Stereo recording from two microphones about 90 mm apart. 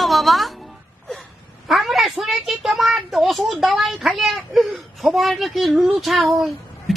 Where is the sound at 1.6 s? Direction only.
Centre (ahead or behind).